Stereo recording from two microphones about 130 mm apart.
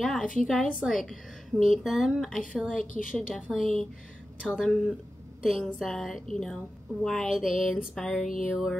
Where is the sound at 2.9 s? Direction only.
90° left.